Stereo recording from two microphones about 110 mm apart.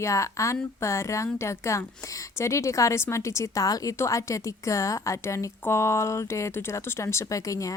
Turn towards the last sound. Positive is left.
turn(degrees=30)  # may be behind; listen again after turning